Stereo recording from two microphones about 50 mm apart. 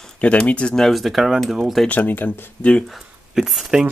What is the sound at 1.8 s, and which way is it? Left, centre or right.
Speech, left.